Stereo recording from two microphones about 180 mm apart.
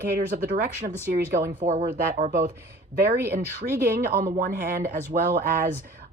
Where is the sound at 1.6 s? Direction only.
45° right (ahead or behind).